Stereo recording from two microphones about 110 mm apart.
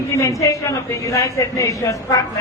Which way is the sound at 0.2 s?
30° left (ahead or behind).